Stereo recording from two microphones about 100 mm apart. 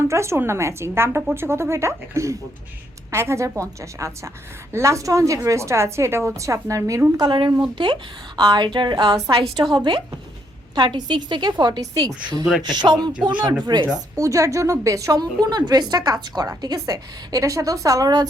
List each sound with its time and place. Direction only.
0.1 s a woman's voice: 30° right (ahead or behind)
7.2 s a woman's voice: 50° right (ahead or behind)
13.8 s a woman's voice: 35° right (ahead or behind)